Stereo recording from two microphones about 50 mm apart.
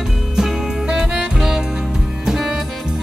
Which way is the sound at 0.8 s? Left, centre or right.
Centre.